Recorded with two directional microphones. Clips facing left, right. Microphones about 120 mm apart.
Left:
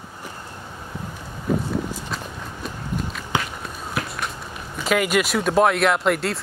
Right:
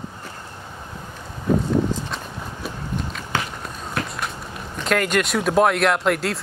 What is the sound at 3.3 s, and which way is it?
Walk, 15° left (ahead or behind).